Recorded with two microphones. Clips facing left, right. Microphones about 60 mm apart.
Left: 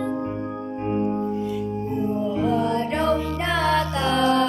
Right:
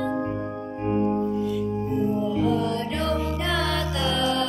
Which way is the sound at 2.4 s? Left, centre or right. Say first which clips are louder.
Left 4 dB; left.